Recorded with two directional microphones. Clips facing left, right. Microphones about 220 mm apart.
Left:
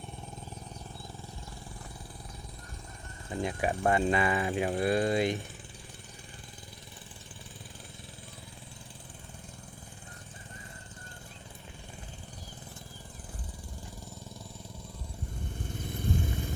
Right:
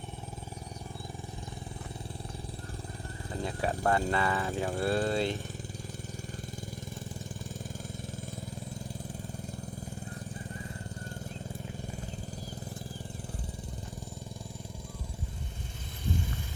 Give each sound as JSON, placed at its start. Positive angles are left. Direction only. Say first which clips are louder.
{"t": 3.4, "sound": "speech", "louder": "left 1 dB", "side_deg": 15}